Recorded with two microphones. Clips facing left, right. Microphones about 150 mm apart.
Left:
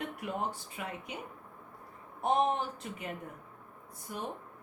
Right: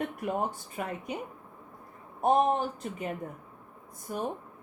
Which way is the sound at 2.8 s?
45° right (ahead or behind).